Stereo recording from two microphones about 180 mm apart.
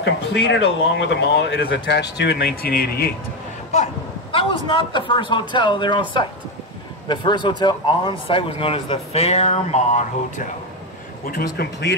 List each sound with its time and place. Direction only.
0.0 s speech: 70° left (ahead or behind)
3.7 s a man's voice: 35° left (ahead or behind)
11.2 s speech: 55° left (ahead or behind)